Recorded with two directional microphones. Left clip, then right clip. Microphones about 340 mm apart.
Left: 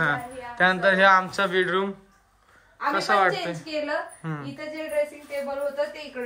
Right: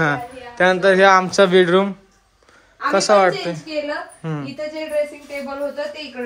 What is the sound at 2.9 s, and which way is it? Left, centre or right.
A woman's voice, centre.